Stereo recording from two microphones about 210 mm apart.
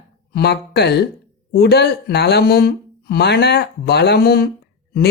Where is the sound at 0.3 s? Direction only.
50° left (ahead or behind).